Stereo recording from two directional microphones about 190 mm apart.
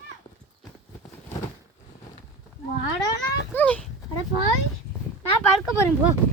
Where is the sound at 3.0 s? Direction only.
20° left (ahead or behind).